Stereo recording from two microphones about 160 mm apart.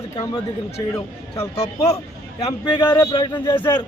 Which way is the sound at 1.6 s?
45° left (ahead or behind).